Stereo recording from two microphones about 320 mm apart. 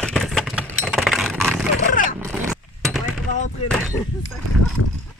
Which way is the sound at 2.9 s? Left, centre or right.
Centre.